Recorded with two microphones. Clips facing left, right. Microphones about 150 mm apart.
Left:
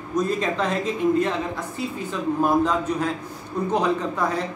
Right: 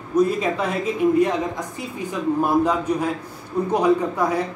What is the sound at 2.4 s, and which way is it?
A man's voice, 10° right (ahead or behind).